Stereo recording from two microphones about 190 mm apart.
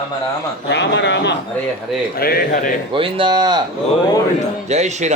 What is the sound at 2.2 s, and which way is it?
Speech, 55° left (ahead or behind).